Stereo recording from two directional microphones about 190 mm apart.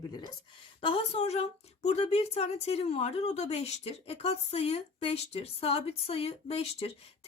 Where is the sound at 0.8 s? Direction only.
30° left (ahead or behind).